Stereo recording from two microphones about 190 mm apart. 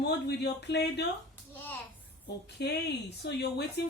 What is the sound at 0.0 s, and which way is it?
A woman's voice, 60° left (ahead or behind).